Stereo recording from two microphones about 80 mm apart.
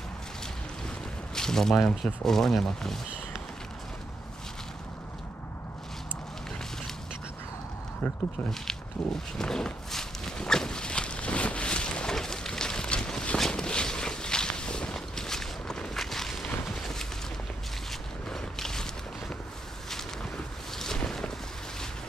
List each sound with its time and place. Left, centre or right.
1.3 s speech: centre
8.0 s speech: centre
8.5 s walk: centre
16.6 s a sound: centre
18.3 s boat: centre
20.7 s boat: centre